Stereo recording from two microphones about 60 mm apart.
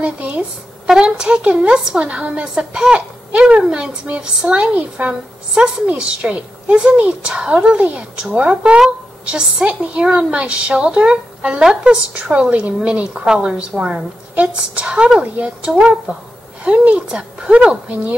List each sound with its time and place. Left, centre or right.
0.0 s a woman's voice: centre